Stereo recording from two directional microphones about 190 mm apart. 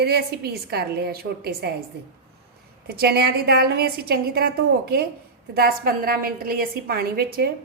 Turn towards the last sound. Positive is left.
turn(degrees=-50)  # may be behind; listen again after turning